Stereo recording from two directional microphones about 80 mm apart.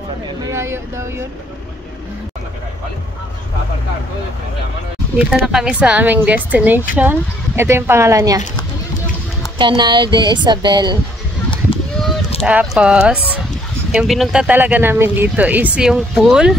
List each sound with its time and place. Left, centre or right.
0.5 s speech: right
5.3 s a woman's voice: centre; by 8.4 s right
9.6 s speech: right
12.0 s a sound: centre
12.4 s speech: centre
13.9 s speech: centre
14.5 s a woman's voice: right
15.8 s speech: centre